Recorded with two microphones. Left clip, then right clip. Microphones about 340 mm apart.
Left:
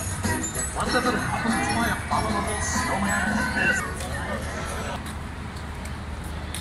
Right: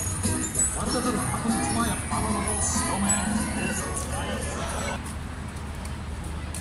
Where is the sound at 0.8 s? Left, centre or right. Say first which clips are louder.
Left 6 dB; left.